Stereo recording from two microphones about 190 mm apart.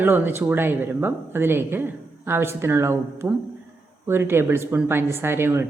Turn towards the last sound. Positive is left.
turn(degrees=-10)  # may be behind; listen again after turning